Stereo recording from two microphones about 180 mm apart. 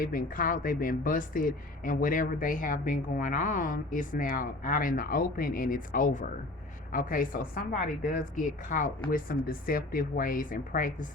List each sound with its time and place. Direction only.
0.0 s speech: 50° left (ahead or behind)